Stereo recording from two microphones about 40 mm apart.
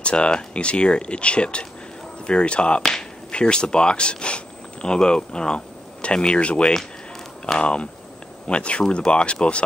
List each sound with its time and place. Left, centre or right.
0.0 s speech: left
2.8 s speech: centre